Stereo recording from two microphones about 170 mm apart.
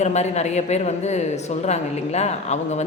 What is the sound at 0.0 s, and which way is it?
A woman's voice, 40° left (ahead or behind).